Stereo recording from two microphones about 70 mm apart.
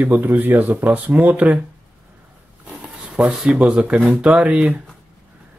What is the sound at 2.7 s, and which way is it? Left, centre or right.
Speech, centre.